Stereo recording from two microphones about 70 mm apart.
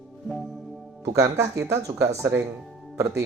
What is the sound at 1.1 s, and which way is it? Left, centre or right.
Speech, right.